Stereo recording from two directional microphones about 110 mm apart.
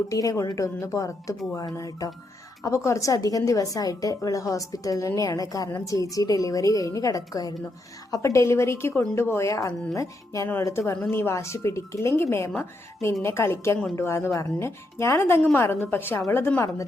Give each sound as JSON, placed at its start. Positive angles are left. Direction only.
{"t": 0.1, "sound": "a woman's voice", "side_deg": 30}